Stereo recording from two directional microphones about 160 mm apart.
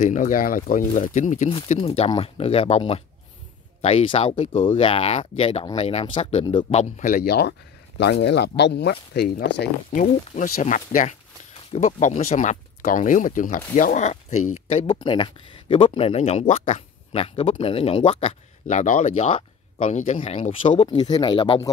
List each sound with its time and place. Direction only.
0.0 s speech: 55° left (ahead or behind); by 6.8 s 35° left (ahead or behind)
6.8 s speech: 55° left (ahead or behind); by 9.7 s 90° left
9.9 s speech: 60° left (ahead or behind); by 21.5 s 30° left (ahead or behind)